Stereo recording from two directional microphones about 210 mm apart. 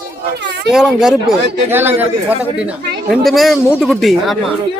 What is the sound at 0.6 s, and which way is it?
Speech, centre (ahead or behind).